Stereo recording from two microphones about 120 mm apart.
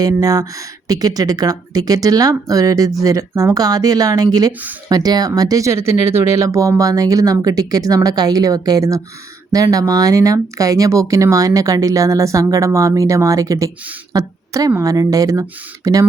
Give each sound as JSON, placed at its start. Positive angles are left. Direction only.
{"t": 0.0, "sound": "speech", "side_deg": -30}